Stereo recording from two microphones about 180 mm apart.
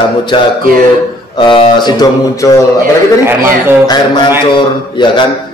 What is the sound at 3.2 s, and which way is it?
Speech, 15° right (ahead or behind).